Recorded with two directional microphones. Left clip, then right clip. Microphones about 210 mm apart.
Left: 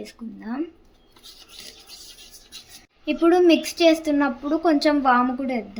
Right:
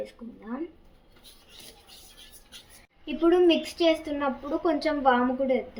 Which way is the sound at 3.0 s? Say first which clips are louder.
Left 4 dB; 45° left (ahead or behind).